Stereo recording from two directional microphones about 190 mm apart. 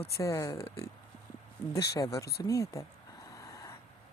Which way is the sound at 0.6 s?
30° left (ahead or behind).